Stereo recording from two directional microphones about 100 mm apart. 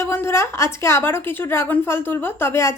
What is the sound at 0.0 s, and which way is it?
A woman's voice, 25° left (ahead or behind).